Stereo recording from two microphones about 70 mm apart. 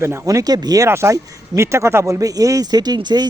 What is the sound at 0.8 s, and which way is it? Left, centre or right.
Speech, right.